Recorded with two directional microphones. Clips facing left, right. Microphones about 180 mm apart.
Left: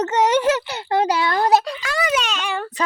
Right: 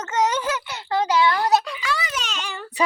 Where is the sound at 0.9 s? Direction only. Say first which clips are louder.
Even; 50° left (ahead or behind).